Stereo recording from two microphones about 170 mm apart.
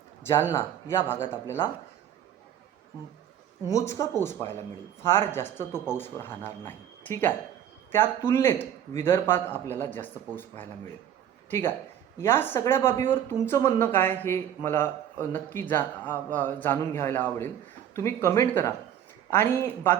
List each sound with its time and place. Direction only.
0.2 s a man's voice: 15° left (ahead or behind)
3.7 s speech: 20° left (ahead or behind)
12.2 s speech: 10° left (ahead or behind)